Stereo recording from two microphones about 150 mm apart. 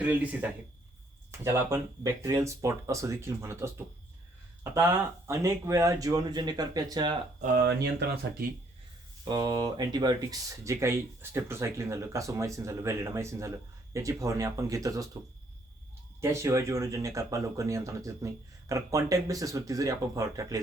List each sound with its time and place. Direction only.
0.0 s speech: 10° right (ahead or behind); by 7.2 s 30° right (ahead or behind)
7.4 s speech: 90° right
9.2 s speech: 25° right (ahead or behind)
16.2 s speech: 20° right (ahead or behind)